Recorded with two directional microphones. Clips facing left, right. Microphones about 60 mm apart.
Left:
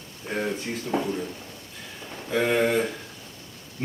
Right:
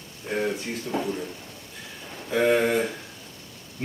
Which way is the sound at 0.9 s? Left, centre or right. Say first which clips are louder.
Left 2 dB; left.